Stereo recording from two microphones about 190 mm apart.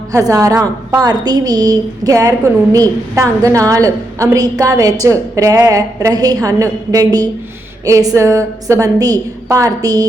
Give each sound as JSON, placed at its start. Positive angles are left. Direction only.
{"t": 0.1, "sound": "a woman's voice", "side_deg": -20}